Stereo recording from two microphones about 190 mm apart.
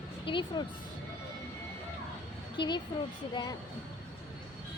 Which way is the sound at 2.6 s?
25° left (ahead or behind).